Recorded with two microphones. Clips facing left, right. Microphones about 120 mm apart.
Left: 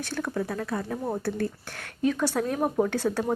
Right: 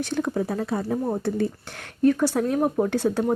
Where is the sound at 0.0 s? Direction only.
15° right (ahead or behind).